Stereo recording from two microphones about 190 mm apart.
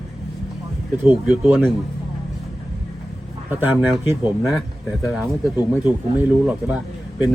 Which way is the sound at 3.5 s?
10° right (ahead or behind).